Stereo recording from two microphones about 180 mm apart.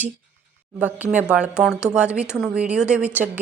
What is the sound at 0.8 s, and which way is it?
A woman's voice, 10° right (ahead or behind).